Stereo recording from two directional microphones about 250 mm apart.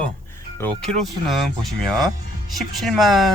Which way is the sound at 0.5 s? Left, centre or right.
Centre.